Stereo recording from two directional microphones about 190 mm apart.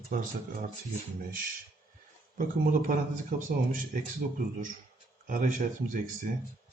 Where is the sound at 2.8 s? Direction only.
45° right (ahead or behind).